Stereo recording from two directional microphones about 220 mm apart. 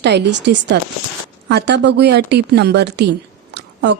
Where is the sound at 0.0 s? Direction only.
50° right (ahead or behind).